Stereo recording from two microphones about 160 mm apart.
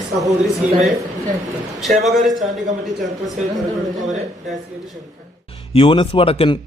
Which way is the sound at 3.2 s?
Centre (ahead or behind).